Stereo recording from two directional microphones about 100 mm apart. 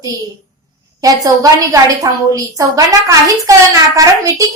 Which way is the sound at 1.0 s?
35° right (ahead or behind).